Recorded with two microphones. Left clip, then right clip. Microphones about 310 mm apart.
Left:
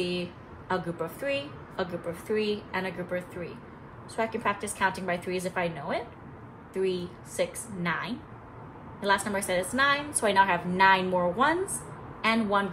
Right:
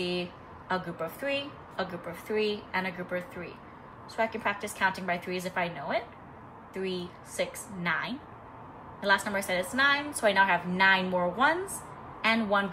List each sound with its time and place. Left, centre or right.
0.0 s a woman's voice: centre